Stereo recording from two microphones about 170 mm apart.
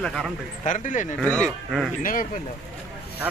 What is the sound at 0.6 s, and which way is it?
Speech, 45° left (ahead or behind).